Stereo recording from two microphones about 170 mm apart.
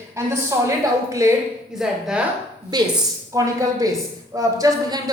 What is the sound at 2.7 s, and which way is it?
A woman's voice, 25° right (ahead or behind).